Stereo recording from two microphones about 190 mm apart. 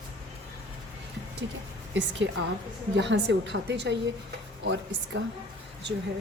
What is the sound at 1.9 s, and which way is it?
A woman's voice, 75° right (ahead or behind).